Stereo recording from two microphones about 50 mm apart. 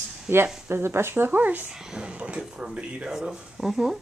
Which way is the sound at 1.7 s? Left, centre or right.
Centre.